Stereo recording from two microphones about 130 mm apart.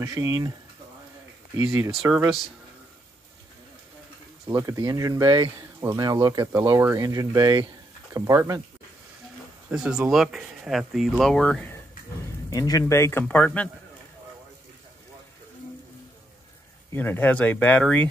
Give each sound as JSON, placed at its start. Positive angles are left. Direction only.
{"t": 0.0, "sound": "speech", "side_deg": -25}
{"t": 2.0, "sound": "speech", "side_deg": -10}
{"t": 4.5, "sound": "speech", "side_deg": -25}
{"t": 9.7, "sound": "speech", "side_deg": -5}
{"t": 12.4, "sound": "speech", "side_deg": 30}
{"t": 16.9, "sound": "speech", "side_deg": 15}